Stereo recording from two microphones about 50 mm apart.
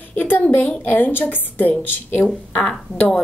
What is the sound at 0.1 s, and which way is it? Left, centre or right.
A woman's voice, left.